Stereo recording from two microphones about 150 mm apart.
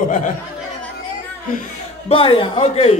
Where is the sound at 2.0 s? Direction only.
35° left (ahead or behind).